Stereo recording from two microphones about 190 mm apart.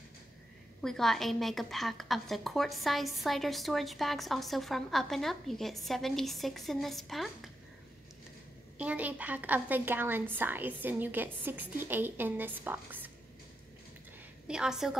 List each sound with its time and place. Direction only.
0.8 s a woman's voice: centre (ahead or behind)
8.7 s a woman's voice: 10° right (ahead or behind)
14.5 s a woman's voice: 5° right (ahead or behind)